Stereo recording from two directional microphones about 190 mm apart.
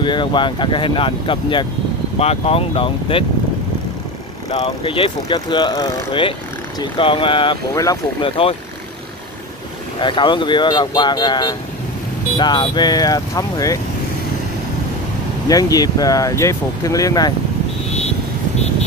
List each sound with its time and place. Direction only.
0.0 s speech: 25° left (ahead or behind)
4.5 s speech: 30° left (ahead or behind)
9.9 s speech: 25° left (ahead or behind)
15.4 s speech: 20° left (ahead or behind)